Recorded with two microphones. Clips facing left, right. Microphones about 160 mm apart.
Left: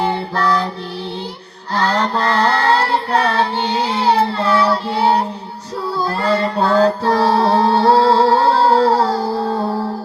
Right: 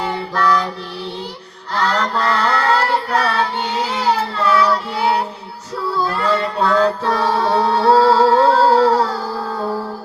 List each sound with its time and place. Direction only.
0.0 s music: 30° left (ahead or behind)
1.7 s child singing: 30° left (ahead or behind)
6.1 s music: 35° left (ahead or behind)